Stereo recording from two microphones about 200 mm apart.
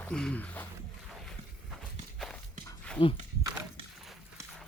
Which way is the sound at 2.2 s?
5° left (ahead or behind).